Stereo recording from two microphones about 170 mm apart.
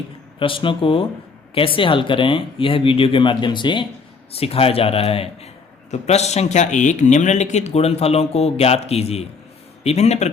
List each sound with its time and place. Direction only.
0.3 s speech: 30° left (ahead or behind)